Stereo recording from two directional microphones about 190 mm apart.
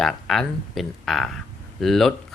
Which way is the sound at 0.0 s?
Centre (ahead or behind).